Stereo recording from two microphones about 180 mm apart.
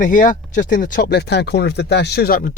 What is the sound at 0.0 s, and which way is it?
Speech, 45° left (ahead or behind).